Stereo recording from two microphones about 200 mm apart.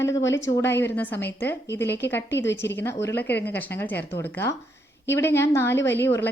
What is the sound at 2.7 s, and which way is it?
A woman's voice, 10° left (ahead or behind).